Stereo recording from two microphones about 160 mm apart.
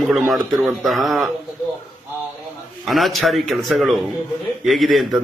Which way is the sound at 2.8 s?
Centre (ahead or behind).